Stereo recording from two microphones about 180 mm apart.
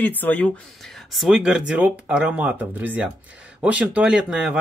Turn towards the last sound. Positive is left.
turn(degrees=-5)  # may be behind; listen again after turning